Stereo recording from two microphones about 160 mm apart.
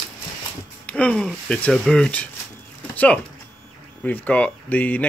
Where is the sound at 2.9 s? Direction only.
10° left (ahead or behind).